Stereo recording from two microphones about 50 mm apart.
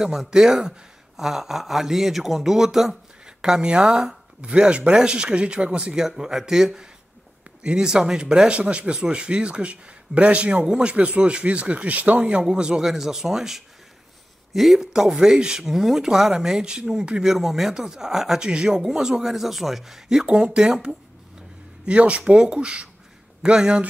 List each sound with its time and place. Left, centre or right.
0.0 s speech: centre; by 12.3 s right
12.3 s speech: centre
17.2 s speech: centre
20.2 s speech: centre